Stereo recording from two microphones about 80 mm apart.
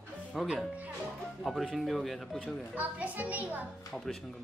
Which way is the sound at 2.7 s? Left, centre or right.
Centre.